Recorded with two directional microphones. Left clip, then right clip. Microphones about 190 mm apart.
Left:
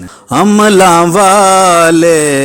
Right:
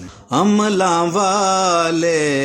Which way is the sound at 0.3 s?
40° left (ahead or behind).